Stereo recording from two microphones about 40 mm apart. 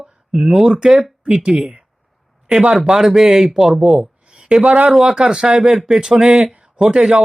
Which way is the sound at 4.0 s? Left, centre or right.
Right.